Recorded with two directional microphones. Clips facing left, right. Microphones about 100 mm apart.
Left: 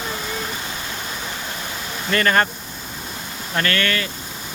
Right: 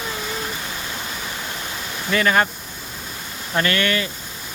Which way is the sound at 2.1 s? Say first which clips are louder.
Even; 5° right (ahead or behind).